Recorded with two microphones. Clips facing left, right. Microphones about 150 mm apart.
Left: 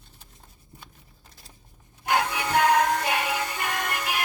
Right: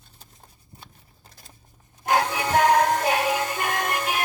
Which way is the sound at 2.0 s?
40° right (ahead or behind).